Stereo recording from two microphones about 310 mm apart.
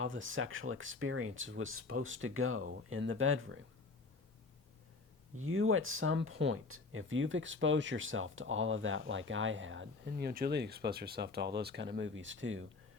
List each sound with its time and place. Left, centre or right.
0.0 s speech: right
5.4 s speech: right